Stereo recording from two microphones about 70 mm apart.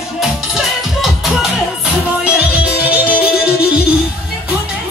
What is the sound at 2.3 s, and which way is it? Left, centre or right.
Music, centre.